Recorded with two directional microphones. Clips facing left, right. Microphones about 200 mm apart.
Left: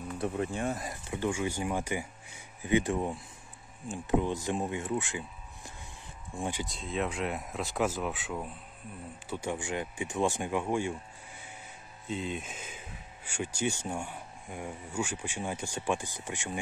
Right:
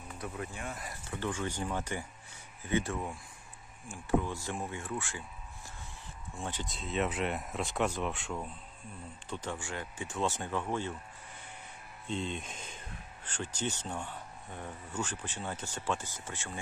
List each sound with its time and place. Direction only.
0.2 s speech: 30° left (ahead or behind)
1.1 s speech: 10° left (ahead or behind)
6.3 s speech: 15° left (ahead or behind)
6.6 s speech: centre (ahead or behind)
12.1 s speech: 5° left (ahead or behind)